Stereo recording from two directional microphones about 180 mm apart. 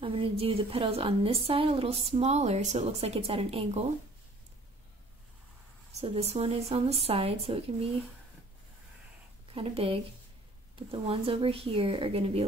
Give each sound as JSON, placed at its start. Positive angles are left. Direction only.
{"t": 0.0, "sound": "a woman's voice", "side_deg": -30}
{"t": 5.9, "sound": "a woman's voice", "side_deg": -35}
{"t": 9.5, "sound": "a woman's voice", "side_deg": -30}